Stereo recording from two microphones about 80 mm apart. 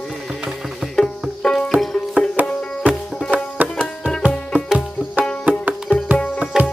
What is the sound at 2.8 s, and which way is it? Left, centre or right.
Music, centre.